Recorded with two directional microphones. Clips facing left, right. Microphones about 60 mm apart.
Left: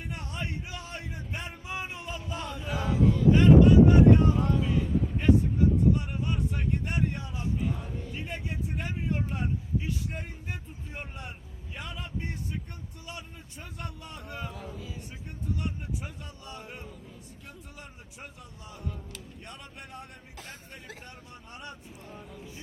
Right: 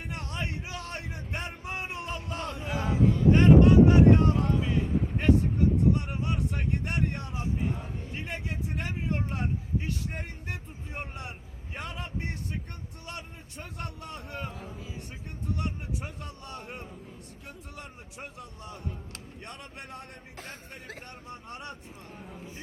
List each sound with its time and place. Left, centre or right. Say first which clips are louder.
0.1 s vehicle: right 2 dB; right
2.7 s a sound: even; right
3.3 s a sound: even; right
4.4 s vehicle: even; right
5.9 s a sound: even; right
7.3 s vehicle: right 1 dB; right
8.1 s vehicle: right 2 dB; right
13.1 s a man's voice: right 2 dB; right
19.5 s speech: right 3 dB; right
20.4 s speech: right 2 dB; right
21.5 s a man's voice: right 1 dB; right
22.3 s speech: right 1 dB; right